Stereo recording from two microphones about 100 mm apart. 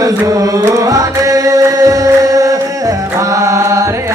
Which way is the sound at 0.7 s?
35° right (ahead or behind).